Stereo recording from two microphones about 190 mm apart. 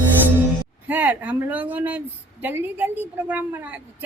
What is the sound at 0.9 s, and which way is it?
Speech, 10° right (ahead or behind).